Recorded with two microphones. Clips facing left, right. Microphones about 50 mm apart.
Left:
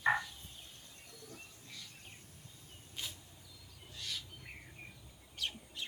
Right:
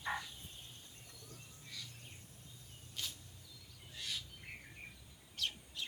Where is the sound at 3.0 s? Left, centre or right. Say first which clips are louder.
Even; left.